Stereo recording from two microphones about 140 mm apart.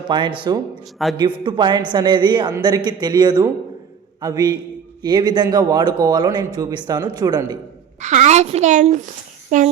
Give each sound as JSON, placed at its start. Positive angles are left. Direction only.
{"t": 0.1, "sound": "speech", "side_deg": -35}
{"t": 1.0, "sound": "a man's voice", "side_deg": 0}
{"t": 1.5, "sound": "speech", "side_deg": -35}
{"t": 8.0, "sound": "a woman's voice", "side_deg": -55}